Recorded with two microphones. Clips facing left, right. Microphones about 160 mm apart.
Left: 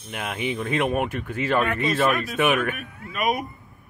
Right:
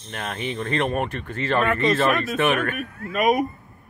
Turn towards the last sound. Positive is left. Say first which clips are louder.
# right 5 dB
turn(degrees=-45)  # may be behind; listen again after turning